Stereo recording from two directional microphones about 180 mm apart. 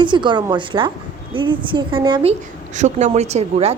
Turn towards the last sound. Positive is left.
turn(degrees=-35)  # may be behind; listen again after turning